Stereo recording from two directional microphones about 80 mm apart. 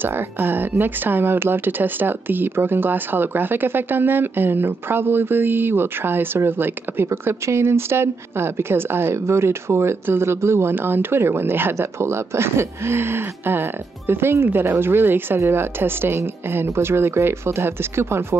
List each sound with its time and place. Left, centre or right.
0.0 s speech: right